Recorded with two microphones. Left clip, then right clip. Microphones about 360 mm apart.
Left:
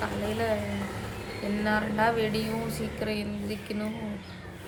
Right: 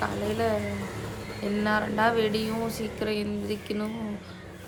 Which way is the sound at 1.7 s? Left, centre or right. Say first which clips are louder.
Right 1 dB; centre.